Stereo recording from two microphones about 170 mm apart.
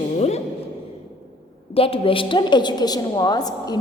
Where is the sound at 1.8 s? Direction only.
35° left (ahead or behind).